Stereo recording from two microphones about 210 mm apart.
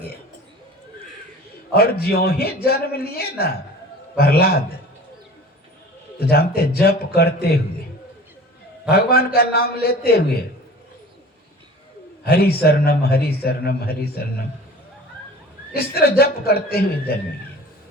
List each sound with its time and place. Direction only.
1.7 s a man's voice: 50° left (ahead or behind)
6.1 s a man's voice: 50° left (ahead or behind)
8.9 s a man's voice: 50° left (ahead or behind)
12.2 s a man's voice: 50° left (ahead or behind)
15.7 s a man's voice: 50° left (ahead or behind)